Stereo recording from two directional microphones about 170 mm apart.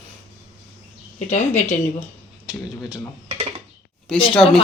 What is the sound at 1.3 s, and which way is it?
Speech, 40° left (ahead or behind).